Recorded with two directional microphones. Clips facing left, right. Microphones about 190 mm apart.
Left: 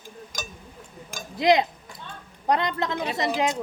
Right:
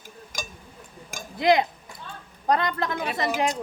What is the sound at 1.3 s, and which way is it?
A woman's voice, 20° left (ahead or behind).